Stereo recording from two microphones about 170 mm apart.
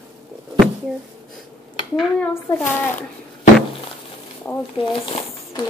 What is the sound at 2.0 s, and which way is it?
A woman's voice, 10° left (ahead or behind).